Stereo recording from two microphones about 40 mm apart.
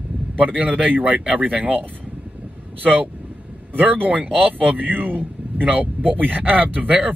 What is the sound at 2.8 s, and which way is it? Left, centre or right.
Speech, right.